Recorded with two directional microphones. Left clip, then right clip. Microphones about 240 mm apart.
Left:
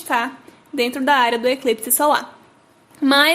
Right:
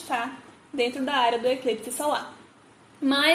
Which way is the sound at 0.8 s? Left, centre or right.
Left.